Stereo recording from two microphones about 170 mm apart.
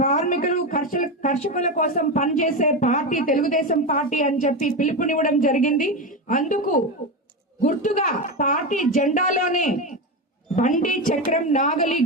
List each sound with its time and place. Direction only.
0.0 s speech: 50° left (ahead or behind)